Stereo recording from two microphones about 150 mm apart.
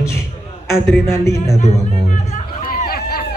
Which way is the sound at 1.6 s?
55° left (ahead or behind).